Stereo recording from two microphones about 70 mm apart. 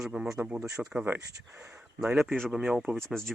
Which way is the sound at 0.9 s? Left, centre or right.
Right.